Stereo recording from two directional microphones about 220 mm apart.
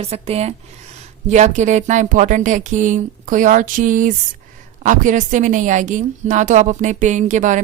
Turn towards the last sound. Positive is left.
turn(degrees=-35)  # may be behind; listen again after turning